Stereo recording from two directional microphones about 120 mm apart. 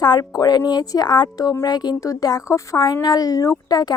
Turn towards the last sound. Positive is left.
turn(degrees=35)  # may be behind; listen again after turning